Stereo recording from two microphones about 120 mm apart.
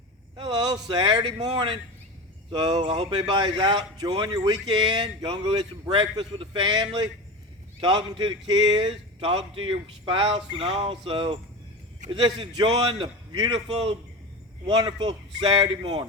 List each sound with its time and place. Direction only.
0.3 s a sound: 40° right (ahead or behind)
0.9 s speech: 40° right (ahead or behind)
13.7 s speech: 50° right (ahead or behind)
14.7 s speech: 40° right (ahead or behind)